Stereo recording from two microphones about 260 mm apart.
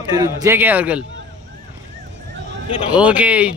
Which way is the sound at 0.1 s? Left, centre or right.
Centre.